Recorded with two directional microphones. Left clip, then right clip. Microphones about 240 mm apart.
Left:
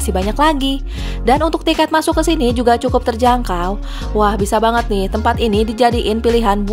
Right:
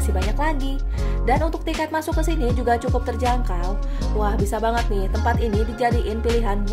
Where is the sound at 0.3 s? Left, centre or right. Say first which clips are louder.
Left 13 dB; left.